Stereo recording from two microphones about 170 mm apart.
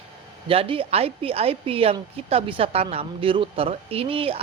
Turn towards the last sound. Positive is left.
turn(degrees=-35)  # may be behind; listen again after turning